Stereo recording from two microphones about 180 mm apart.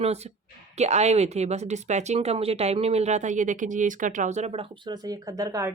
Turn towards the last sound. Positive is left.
turn(degrees=-20)  # may be behind; listen again after turning